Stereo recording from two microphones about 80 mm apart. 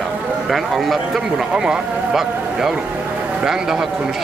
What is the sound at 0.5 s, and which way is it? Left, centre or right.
Speech, centre.